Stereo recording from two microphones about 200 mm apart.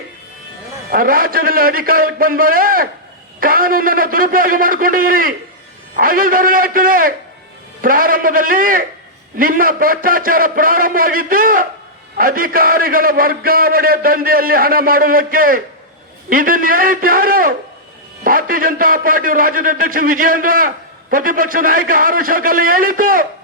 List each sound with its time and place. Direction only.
0.9 s a man's voice: 45° right (ahead or behind)